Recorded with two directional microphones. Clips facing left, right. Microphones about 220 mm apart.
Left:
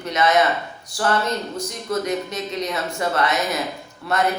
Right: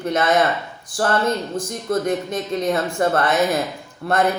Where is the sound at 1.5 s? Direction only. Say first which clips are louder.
Right 3 dB; 50° right (ahead or behind).